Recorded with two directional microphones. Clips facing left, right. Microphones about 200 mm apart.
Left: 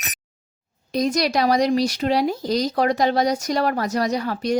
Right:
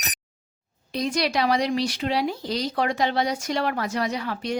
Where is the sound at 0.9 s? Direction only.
40° left (ahead or behind).